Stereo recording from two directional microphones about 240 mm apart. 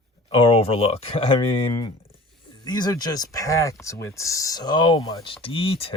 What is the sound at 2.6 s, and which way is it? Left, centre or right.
Speech, centre.